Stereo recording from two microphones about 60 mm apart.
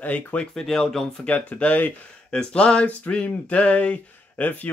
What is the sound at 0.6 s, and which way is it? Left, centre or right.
Speech, centre.